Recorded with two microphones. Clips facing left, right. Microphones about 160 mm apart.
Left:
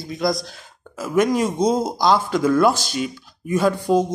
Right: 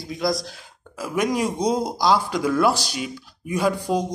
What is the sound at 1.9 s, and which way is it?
Speech, centre (ahead or behind).